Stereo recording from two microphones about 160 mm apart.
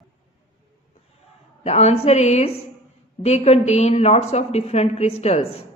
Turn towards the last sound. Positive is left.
turn(degrees=40)  # may be behind; listen again after turning